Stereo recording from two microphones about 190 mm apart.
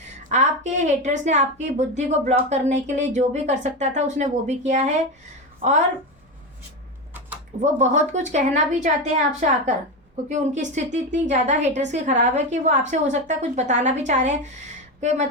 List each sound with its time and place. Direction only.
0.3 s a woman's voice: 40° right (ahead or behind)
7.6 s a woman's voice: 40° right (ahead or behind)